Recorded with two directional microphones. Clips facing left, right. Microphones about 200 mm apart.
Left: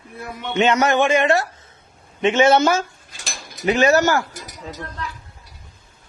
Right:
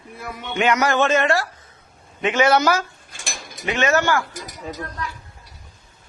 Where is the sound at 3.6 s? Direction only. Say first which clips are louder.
Left 4 dB; 35° left (ahead or behind).